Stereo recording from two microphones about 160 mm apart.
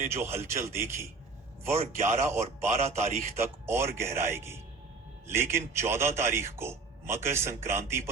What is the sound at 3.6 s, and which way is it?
A man's voice, 15° right (ahead or behind).